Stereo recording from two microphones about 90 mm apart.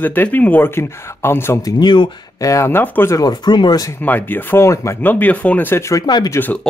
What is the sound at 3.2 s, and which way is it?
Speech, 50° left (ahead or behind).